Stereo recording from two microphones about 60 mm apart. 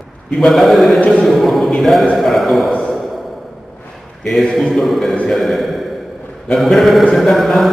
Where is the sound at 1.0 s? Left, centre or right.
Centre.